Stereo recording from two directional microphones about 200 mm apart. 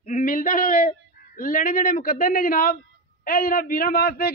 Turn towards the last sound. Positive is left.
turn(degrees=50)  # may be behind; listen again after turning